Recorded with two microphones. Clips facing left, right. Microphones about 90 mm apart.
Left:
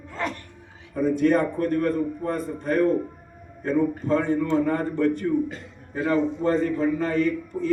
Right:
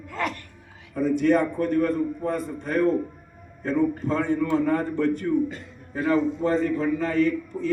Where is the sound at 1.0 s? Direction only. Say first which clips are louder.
Even; 45° left (ahead or behind).